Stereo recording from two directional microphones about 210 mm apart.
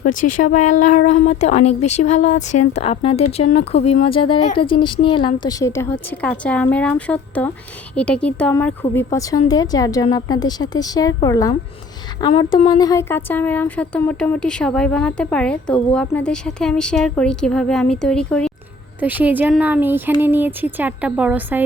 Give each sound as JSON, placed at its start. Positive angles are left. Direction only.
{"t": 0.0, "sound": "a woman's voice", "side_deg": 35}
{"t": 18.9, "sound": "speech", "side_deg": -10}